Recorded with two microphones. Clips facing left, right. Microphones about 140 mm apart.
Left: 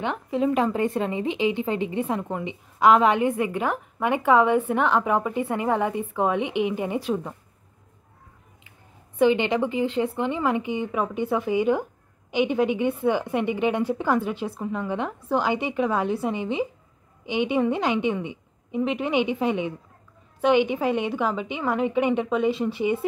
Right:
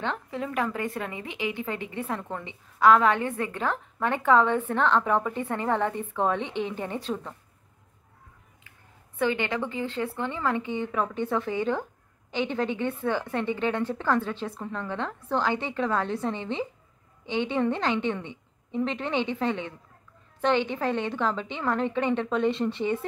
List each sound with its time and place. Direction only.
0.0 s speech: 15° left (ahead or behind)
9.2 s speech: 20° left (ahead or behind)